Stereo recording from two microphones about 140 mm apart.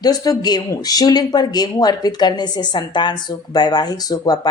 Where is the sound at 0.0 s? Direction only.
25° left (ahead or behind).